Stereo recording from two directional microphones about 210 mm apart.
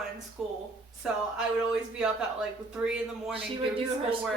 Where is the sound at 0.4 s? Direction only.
Centre (ahead or behind).